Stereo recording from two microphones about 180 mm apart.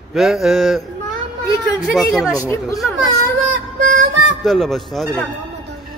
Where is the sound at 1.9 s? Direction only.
Centre (ahead or behind).